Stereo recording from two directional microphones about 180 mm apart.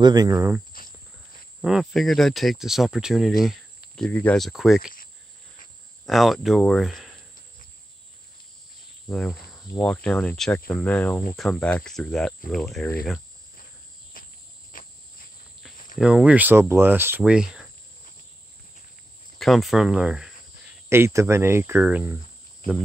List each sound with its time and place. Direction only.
0.0 s speech: 20° right (ahead or behind)
1.6 s speech: centre (ahead or behind)
6.0 s speech: centre (ahead or behind)
9.1 s speech: 5° left (ahead or behind)
14.2 s cricket: 50° left (ahead or behind)
16.0 s speech: 5° right (ahead or behind)
19.3 s cricket: centre (ahead or behind)
20.9 s speech: 15° right (ahead or behind)